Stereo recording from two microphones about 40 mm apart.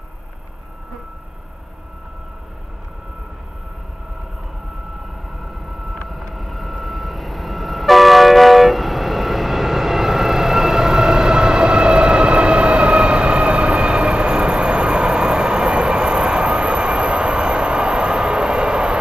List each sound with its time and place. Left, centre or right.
5.4 s vehicle: centre; by 18.9 s right